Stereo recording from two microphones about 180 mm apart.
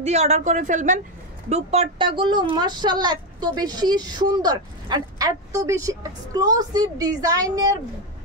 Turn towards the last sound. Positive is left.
turn(degrees=-20)  # may be behind; listen again after turning